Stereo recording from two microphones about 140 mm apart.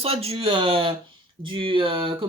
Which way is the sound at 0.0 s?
45° right (ahead or behind).